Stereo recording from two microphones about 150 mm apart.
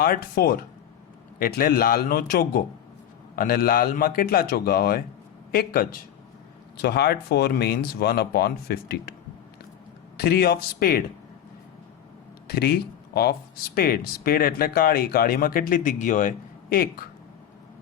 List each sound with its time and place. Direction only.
0.0 s a man's voice: 80° left
5.5 s speech: 75° left (ahead or behind)
6.7 s speech: 90° left
10.2 s speech: 90° left
12.5 s speech: 90° left